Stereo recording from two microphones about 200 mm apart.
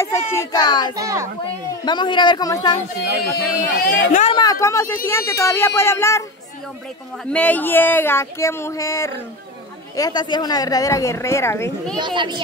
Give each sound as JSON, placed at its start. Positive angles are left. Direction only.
{"t": 0.0, "sound": "a child's voice", "side_deg": 15}
{"t": 0.9, "sound": "a child's voice", "side_deg": -15}
{"t": 1.9, "sound": "a man's voice", "side_deg": 20}
{"t": 3.3, "sound": "speech", "side_deg": 50}
{"t": 4.2, "sound": "speech", "side_deg": 25}
{"t": 7.2, "sound": "speech", "side_deg": 5}
{"t": 12.0, "sound": "a child's voice", "side_deg": -25}